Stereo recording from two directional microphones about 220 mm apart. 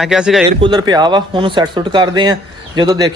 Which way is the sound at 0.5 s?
20° right (ahead or behind).